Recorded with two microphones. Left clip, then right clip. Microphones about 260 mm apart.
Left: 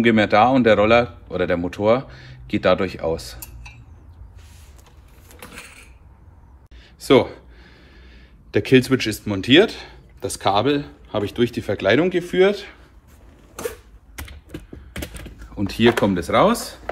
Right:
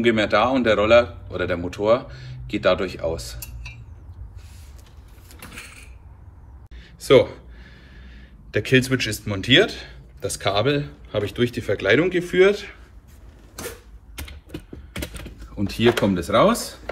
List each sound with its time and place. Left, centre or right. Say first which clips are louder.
0.0 s a man's voice: left 3 dB; left
6.8 s speech: right 1 dB; centre
15.5 s a man's voice: left 2 dB; left